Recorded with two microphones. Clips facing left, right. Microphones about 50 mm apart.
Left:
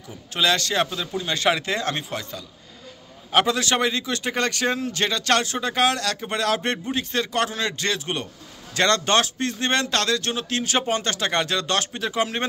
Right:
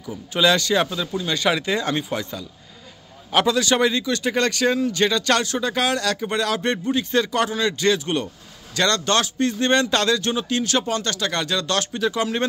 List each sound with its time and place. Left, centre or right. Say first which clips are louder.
0.3 s speech: right 4 dB; centre
0.8 s speech: right 2 dB; centre
3.3 s speech: right 2 dB; centre
10.8 s speech: even; centre